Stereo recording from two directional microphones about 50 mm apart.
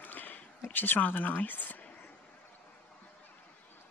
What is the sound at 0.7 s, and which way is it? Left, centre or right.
Speech, left.